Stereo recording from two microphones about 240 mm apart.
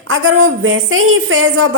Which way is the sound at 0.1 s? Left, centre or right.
Right.